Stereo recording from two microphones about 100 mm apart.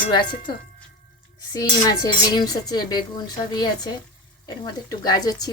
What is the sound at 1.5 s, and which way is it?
Speech, 40° left (ahead or behind).